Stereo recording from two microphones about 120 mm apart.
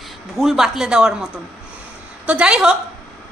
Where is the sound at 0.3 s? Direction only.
Centre (ahead or behind).